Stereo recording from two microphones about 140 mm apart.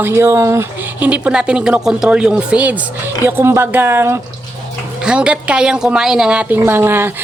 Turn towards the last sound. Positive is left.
turn(degrees=-15)  # may be behind; listen again after turning